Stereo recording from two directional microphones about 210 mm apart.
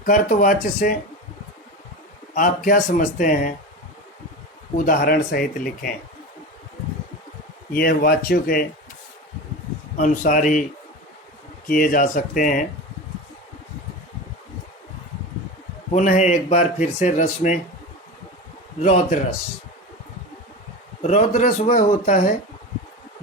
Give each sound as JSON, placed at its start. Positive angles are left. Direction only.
{"t": 0.0, "sound": "speech", "side_deg": 40}
{"t": 2.6, "sound": "speech", "side_deg": 40}
{"t": 4.9, "sound": "speech", "side_deg": 45}
{"t": 7.7, "sound": "speech", "side_deg": 45}
{"t": 10.0, "sound": "speech", "side_deg": 40}
{"t": 11.7, "sound": "speech", "side_deg": 40}
{"t": 15.9, "sound": "speech", "side_deg": 35}
{"t": 18.8, "sound": "speech", "side_deg": 30}
{"t": 21.0, "sound": "speech", "side_deg": 35}